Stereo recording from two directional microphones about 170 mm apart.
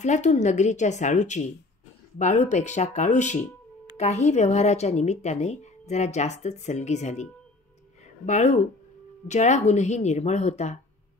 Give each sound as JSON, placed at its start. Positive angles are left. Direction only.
{"t": 0.0, "sound": "a woman's voice", "side_deg": 45}
{"t": 8.0, "sound": "a sound", "side_deg": 40}
{"t": 9.3, "sound": "a woman's voice", "side_deg": 45}